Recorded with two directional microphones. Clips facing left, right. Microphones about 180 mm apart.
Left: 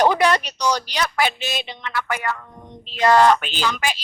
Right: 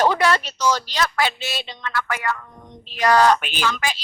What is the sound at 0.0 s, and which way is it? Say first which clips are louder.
A woman's voice: left 1 dB; 15° left (ahead or behind).